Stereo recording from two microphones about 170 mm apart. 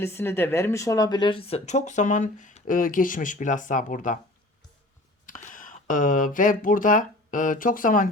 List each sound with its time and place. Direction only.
0.0 s speech: 15° left (ahead or behind); by 4.2 s 50° left (ahead or behind)
5.2 s speech: 55° left (ahead or behind)